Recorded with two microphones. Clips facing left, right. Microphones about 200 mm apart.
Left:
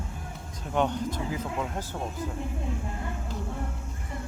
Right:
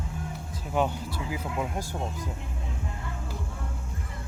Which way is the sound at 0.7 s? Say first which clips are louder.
Left 1 dB; 5° right (ahead or behind).